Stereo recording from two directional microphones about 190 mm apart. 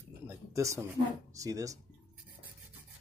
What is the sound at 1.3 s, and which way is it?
Speech, 20° right (ahead or behind).